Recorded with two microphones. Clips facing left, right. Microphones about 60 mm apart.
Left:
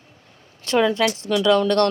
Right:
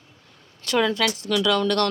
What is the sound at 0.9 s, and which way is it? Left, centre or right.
Speech, left.